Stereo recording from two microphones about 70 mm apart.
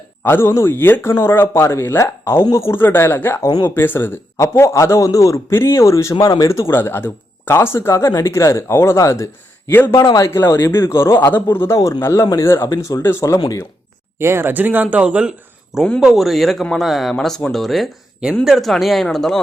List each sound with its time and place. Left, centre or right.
0.3 s speech: left
2.8 s speech: left
4.5 s speech: left
5.5 s speech: left
6.1 s a man's voice: left
10.4 s speech: left
12.5 s speech: left
12.8 s speech: left
14.2 s speech: right; by 15.8 s centre
16.0 s speech: centre